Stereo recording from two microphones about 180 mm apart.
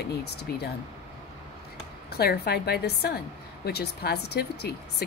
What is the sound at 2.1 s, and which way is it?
Speech, 60° left (ahead or behind).